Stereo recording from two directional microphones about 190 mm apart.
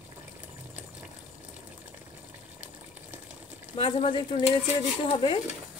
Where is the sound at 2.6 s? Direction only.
10° right (ahead or behind).